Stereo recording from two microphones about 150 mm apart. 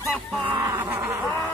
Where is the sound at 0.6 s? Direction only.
15° right (ahead or behind).